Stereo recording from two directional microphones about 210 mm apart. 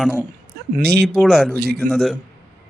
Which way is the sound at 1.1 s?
Centre (ahead or behind).